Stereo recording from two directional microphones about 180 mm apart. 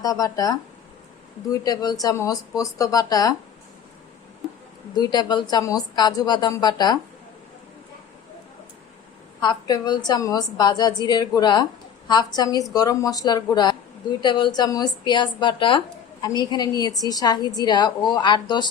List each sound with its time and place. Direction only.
0.0 s a woman's voice: 20° left (ahead or behind)
1.6 s a woman's voice: 20° left (ahead or behind)
4.9 s a woman's voice: 25° left (ahead or behind)
9.4 s a woman's voice: 25° left (ahead or behind)